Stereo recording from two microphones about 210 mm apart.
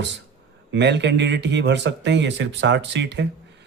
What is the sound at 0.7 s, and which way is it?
Speech, 55° right (ahead or behind).